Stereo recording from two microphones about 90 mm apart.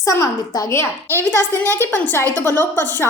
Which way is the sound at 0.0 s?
35° left (ahead or behind).